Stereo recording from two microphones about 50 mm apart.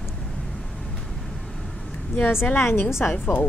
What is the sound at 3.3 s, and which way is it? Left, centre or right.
Speech, left.